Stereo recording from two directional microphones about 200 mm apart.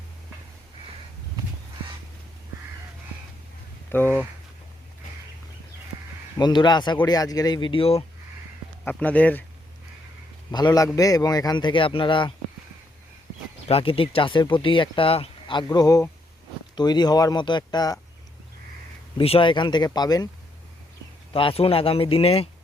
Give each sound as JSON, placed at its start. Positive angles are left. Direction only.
{"t": 3.9, "sound": "speech", "side_deg": 10}
{"t": 6.4, "sound": "speech", "side_deg": 20}
{"t": 8.8, "sound": "speech", "side_deg": 10}
{"t": 10.5, "sound": "speech", "side_deg": 20}
{"t": 13.7, "sound": "speech", "side_deg": 30}
{"t": 19.1, "sound": "speech", "side_deg": 25}
{"t": 21.3, "sound": "speech", "side_deg": 25}